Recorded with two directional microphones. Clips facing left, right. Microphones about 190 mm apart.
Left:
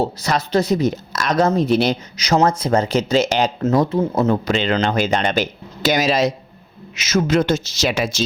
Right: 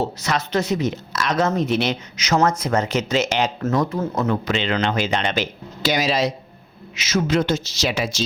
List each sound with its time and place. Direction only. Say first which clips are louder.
0.0 s a woman's voice: left 3 dB; 35° left (ahead or behind)